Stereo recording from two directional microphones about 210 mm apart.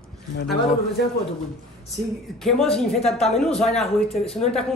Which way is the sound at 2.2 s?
Centre (ahead or behind).